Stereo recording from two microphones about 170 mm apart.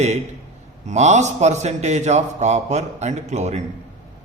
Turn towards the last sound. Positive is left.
turn(degrees=-40)  # may be behind; listen again after turning